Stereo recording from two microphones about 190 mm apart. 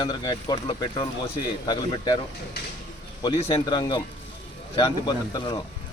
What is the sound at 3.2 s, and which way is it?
Speech, 25° left (ahead or behind).